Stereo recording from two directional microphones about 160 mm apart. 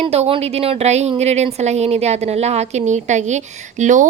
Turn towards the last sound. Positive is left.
turn(degrees=-50)  # may be behind; listen again after turning